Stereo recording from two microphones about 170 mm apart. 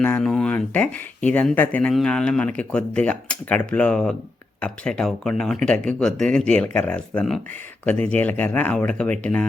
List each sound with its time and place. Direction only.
0.0 s speech: 5° left (ahead or behind)